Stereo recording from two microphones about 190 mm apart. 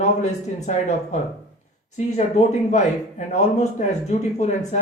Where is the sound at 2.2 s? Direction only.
40° left (ahead or behind).